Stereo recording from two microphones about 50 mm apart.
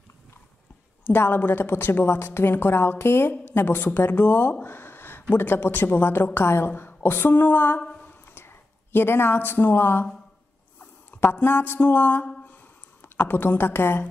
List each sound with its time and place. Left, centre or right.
1.1 s a woman's voice: left
7.2 s music: left
8.3 s speech: left
10.8 s a sound: left
11.4 s music: left
13.0 s a woman's voice: left